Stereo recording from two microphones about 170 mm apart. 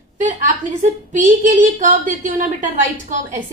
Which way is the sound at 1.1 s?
45° right (ahead or behind).